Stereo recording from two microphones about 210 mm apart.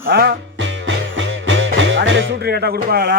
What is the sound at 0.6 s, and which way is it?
Music, 65° right (ahead or behind).